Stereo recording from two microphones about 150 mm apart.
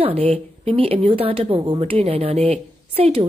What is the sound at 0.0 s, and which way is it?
Speech, 40° right (ahead or behind).